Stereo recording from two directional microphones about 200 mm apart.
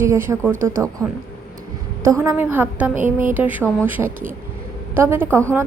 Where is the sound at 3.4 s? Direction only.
10° right (ahead or behind).